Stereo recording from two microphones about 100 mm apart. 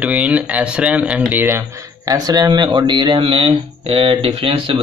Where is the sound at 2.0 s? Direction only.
35° right (ahead or behind); by 4.2 s 70° right (ahead or behind).